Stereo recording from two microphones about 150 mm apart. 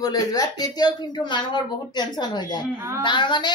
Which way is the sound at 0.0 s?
25° left (ahead or behind).